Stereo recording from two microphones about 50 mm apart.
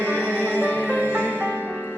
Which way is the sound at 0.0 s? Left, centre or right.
Right.